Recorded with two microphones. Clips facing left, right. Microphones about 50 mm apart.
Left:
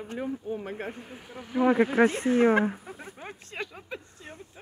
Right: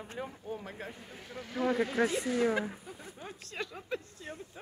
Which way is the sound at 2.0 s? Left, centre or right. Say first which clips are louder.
Left 7 dB; left.